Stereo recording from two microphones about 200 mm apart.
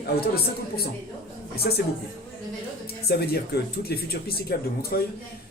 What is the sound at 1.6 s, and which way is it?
Speech, 50° left (ahead or behind).